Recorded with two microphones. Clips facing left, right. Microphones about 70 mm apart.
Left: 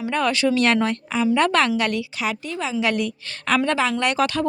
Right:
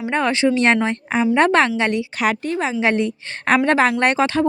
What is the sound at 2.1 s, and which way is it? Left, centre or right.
Speech, right.